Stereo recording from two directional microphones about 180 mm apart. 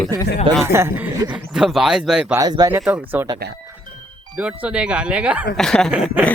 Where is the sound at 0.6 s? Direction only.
15° right (ahead or behind).